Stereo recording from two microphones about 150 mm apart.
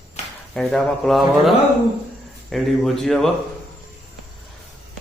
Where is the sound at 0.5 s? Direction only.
Centre (ahead or behind).